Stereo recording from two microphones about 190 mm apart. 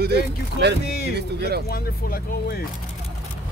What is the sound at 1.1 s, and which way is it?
Speech, 55° right (ahead or behind).